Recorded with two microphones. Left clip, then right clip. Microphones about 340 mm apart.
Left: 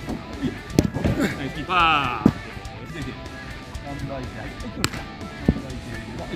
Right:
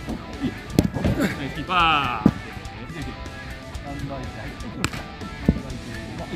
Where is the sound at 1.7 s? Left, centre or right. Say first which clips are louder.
Even; centre.